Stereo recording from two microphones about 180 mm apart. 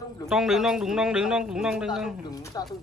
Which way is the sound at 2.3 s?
20° left (ahead or behind).